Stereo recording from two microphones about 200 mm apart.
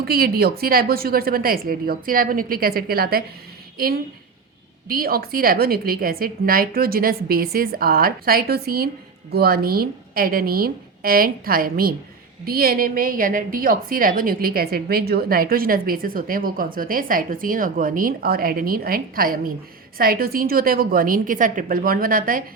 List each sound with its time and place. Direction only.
0.0 s a woman's voice: 50° right (ahead or behind)